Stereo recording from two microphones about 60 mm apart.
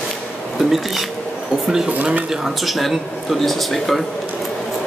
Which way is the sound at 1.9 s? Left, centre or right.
Right.